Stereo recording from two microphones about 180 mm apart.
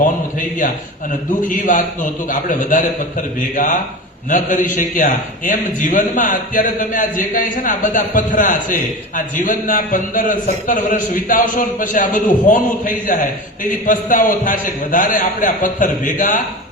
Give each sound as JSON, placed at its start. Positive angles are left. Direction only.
{"t": 1.5, "sound": "a man's voice", "side_deg": 45}